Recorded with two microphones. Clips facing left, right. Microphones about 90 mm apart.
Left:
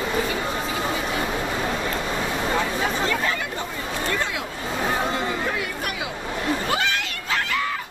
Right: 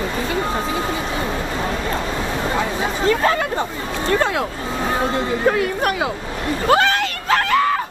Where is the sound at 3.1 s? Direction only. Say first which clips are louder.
Right 8 dB; 50° right (ahead or behind).